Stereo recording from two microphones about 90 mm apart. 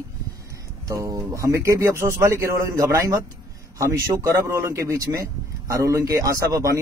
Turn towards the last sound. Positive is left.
turn(degrees=-40)  # may be behind; listen again after turning